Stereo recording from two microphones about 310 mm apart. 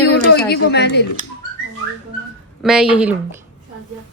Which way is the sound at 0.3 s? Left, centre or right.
Left.